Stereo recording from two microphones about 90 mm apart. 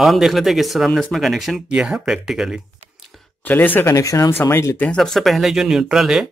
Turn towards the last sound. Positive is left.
turn(degrees=-5)  # may be behind; listen again after turning